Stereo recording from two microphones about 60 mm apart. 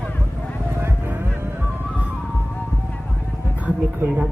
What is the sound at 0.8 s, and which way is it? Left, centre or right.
Vehicle, right.